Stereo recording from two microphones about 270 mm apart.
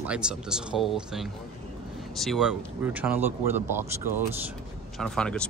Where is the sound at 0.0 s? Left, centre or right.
Centre.